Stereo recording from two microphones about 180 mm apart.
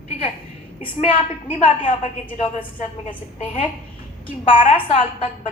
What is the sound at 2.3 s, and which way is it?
A woman's voice, 40° left (ahead or behind).